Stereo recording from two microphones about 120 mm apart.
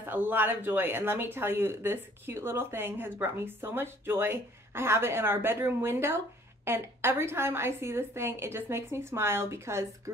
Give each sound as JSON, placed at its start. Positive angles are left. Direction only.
{"t": 0.1, "sound": "speech", "side_deg": -15}